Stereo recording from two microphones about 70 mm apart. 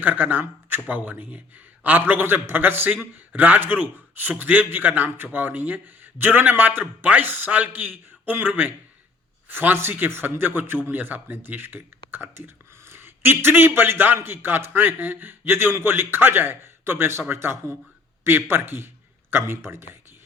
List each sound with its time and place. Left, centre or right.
0.0 s a man's voice: right